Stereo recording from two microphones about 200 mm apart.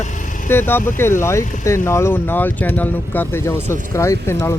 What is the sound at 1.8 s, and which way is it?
Speech, 15° left (ahead or behind).